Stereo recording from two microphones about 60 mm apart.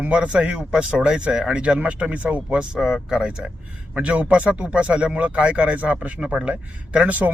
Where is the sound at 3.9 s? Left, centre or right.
Right.